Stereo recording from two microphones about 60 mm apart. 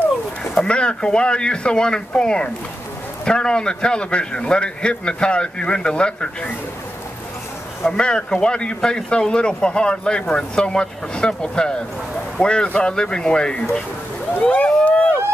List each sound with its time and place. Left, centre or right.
0.7 s speech: centre
7.9 s speech: centre